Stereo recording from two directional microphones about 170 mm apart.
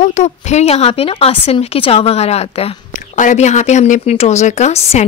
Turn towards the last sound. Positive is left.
turn(degrees=40)  # may be behind; listen again after turning